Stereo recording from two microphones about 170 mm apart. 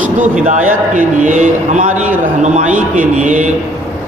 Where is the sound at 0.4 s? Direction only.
50° right (ahead or behind).